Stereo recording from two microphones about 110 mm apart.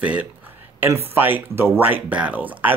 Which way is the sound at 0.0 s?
10° right (ahead or behind).